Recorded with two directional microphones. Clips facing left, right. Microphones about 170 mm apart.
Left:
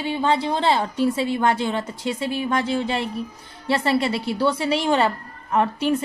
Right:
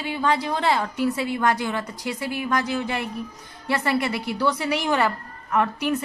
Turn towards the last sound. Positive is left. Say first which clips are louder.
# left 2 dB
turn(degrees=30)  # may be behind; listen again after turning